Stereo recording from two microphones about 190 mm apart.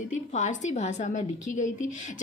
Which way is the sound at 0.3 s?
40° left (ahead or behind).